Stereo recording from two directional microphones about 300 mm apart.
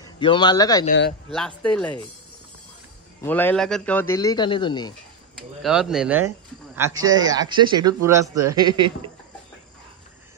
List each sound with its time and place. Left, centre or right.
0.0 s speech: centre
0.8 s speech: left
1.3 s speech: centre
3.2 s a man's voice: centre
5.6 s speech: centre